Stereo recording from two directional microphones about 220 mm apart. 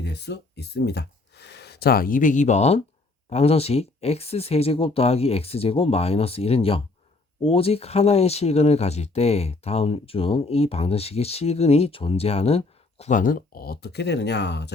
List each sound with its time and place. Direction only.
0.0 s speech: 50° left (ahead or behind)